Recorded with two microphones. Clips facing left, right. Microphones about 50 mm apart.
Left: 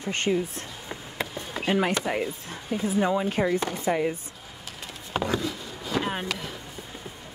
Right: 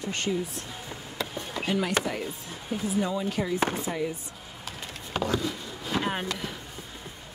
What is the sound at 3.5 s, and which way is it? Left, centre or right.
Speech, right.